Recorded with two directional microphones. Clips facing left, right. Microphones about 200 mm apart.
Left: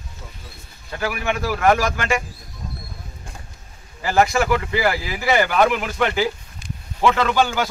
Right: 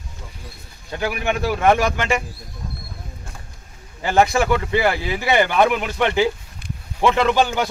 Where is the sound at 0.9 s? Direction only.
20° right (ahead or behind).